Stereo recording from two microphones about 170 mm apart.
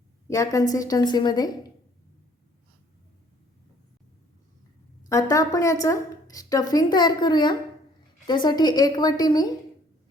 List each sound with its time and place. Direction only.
0.3 s a woman's voice: 20° left (ahead or behind)
5.0 s a woman's voice: 20° left (ahead or behind)